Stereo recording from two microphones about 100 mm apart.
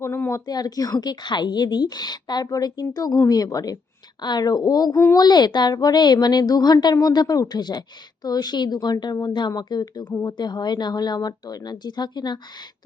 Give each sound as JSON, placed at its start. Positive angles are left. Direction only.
{"t": 0.0, "sound": "a woman's voice", "side_deg": 25}